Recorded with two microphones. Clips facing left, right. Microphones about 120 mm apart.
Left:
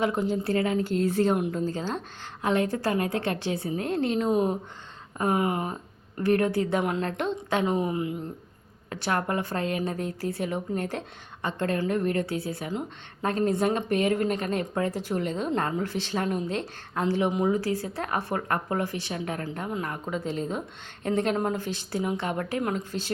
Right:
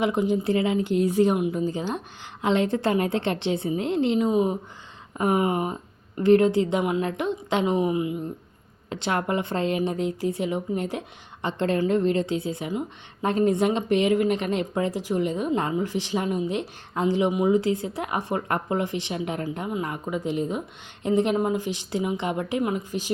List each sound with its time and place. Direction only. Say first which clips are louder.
0.0 s a woman's voice: right 3 dB; 15° right (ahead or behind)
4.3 s speech: right 2 dB; 5° right (ahead or behind)
5.1 s a woman's voice: right 3 dB; 20° right (ahead or behind)